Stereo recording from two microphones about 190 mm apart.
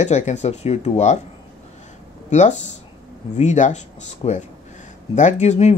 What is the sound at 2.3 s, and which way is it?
Speech, 40° left (ahead or behind).